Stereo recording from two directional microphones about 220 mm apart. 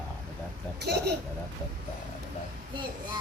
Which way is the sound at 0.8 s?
50° right (ahead or behind).